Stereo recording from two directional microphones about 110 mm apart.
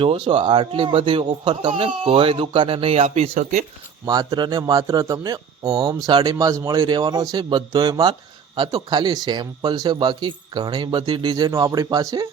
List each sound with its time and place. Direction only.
0.0 s a man's voice: 55° right (ahead or behind)
4.0 s speech: 35° right (ahead or behind)
11.5 s a man's voice: 25° right (ahead or behind)
11.9 s speech: 40° right (ahead or behind)